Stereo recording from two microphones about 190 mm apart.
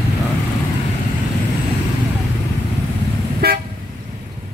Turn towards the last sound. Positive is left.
turn(degrees=-55)  # may be behind; listen again after turning